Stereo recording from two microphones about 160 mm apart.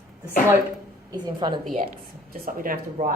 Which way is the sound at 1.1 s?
25° right (ahead or behind).